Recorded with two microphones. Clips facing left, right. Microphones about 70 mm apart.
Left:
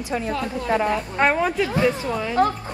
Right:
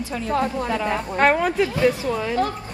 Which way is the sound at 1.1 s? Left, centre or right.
Centre.